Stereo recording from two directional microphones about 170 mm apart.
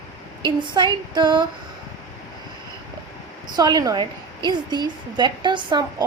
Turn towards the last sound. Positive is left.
turn(degrees=-25)  # may be behind; listen again after turning